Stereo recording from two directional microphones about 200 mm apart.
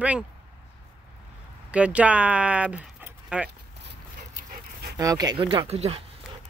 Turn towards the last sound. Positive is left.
turn(degrees=-30)  # may be behind; listen again after turning